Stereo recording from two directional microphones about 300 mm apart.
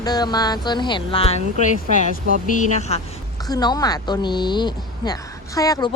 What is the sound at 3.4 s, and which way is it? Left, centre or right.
Speech, centre.